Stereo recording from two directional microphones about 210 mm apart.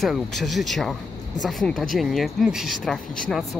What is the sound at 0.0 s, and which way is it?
Speech, centre (ahead or behind).